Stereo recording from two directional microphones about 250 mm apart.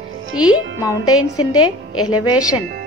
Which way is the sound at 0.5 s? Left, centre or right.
Centre.